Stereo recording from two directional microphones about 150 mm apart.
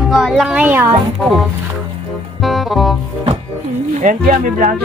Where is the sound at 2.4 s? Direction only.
Centre (ahead or behind).